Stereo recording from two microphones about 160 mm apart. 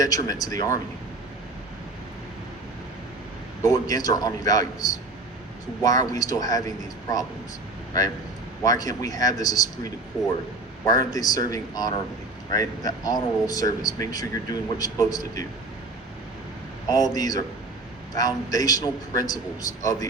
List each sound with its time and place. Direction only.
0.0 s speech: 25° left (ahead or behind)
3.6 s speech: 20° left (ahead or behind)
8.6 s speech: 25° left (ahead or behind)
10.8 s speech: 25° left (ahead or behind)
16.9 s speech: 25° left (ahead or behind)